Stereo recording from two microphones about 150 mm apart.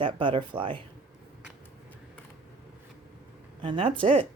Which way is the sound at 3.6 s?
35° right (ahead or behind).